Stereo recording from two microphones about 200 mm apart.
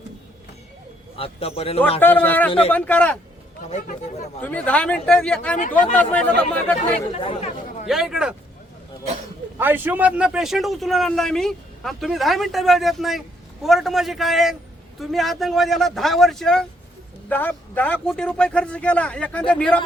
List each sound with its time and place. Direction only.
1.1 s a man's voice: 30° left (ahead or behind)
2.0 s a man's voice: 10° left (ahead or behind)
3.7 s speech: 40° left (ahead or behind)
4.4 s a man's voice: 10° left (ahead or behind)
5.5 s speech: 40° left (ahead or behind)
5.8 s a man's voice: 10° left (ahead or behind)
7.1 s speech: 30° left (ahead or behind)
7.9 s a man's voice: centre (ahead or behind)
9.6 s a man's voice: 10° right (ahead or behind); by 19.8 s 5° left (ahead or behind)